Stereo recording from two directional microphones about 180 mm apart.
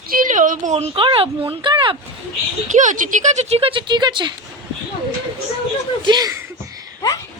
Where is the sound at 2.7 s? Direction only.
45° right (ahead or behind); by 4.3 s 25° right (ahead or behind).